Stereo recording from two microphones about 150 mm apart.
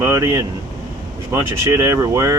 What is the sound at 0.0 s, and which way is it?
Speech, 20° right (ahead or behind).